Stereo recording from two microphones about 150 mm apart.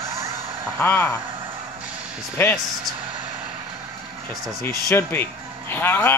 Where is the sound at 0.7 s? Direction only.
15° left (ahead or behind).